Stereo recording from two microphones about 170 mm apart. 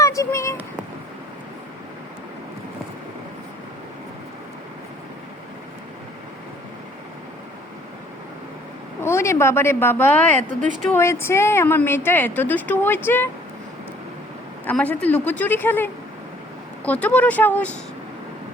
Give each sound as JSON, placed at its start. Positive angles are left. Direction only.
{"t": 0.0, "sound": "a sound", "side_deg": 20}
{"t": 9.0, "sound": "a woman's voice", "side_deg": 15}
{"t": 14.7, "sound": "a woman's voice", "side_deg": 10}